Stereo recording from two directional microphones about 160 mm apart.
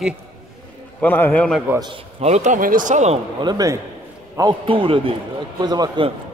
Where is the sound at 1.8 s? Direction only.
35° right (ahead or behind).